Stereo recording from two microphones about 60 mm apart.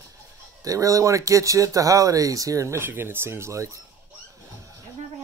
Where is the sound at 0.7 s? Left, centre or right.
Right.